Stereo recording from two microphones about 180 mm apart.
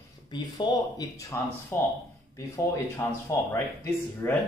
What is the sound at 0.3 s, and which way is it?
Speech, 25° left (ahead or behind).